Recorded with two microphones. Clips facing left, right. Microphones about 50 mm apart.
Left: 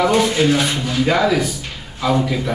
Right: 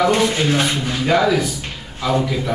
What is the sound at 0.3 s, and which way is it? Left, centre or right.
Speech, right.